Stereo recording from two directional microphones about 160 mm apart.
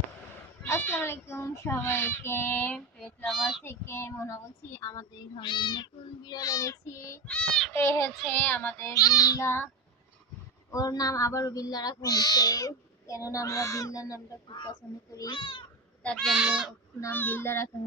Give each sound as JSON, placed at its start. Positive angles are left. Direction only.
{"t": 0.7, "sound": "speech", "side_deg": 15}
{"t": 3.6, "sound": "speech", "side_deg": 15}
{"t": 7.2, "sound": "a sound", "side_deg": 5}
{"t": 7.7, "sound": "speech", "side_deg": 15}
{"t": 10.7, "sound": "speech", "side_deg": 20}
{"t": 16.0, "sound": "speech", "side_deg": 5}
{"t": 16.3, "sound": "speech", "side_deg": -5}
{"t": 17.0, "sound": "speech", "side_deg": 10}